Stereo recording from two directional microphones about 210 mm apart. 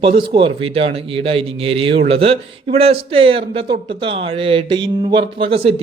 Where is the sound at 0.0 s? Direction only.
25° right (ahead or behind).